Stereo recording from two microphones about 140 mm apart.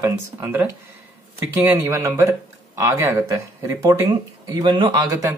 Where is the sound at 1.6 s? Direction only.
20° right (ahead or behind).